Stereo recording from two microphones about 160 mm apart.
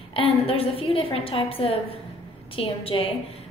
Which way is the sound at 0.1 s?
35° left (ahead or behind).